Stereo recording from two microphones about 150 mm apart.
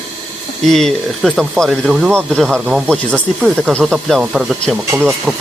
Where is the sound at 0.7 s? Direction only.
5° left (ahead or behind).